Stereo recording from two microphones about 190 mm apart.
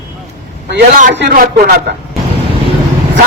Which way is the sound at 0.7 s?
65° right (ahead or behind).